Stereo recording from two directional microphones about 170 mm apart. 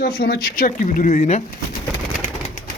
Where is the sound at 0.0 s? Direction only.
80° left.